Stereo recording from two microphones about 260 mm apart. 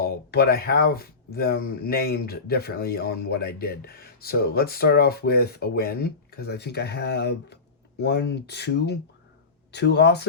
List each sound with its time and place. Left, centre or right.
0.0 s speech: left